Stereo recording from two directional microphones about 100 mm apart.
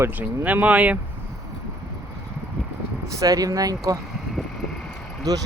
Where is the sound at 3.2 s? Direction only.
35° right (ahead or behind).